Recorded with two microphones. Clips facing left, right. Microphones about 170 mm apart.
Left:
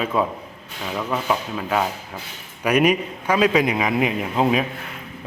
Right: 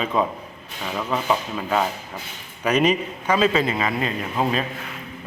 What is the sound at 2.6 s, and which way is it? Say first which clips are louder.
A man's voice: left 1 dB; 10° left (ahead or behind).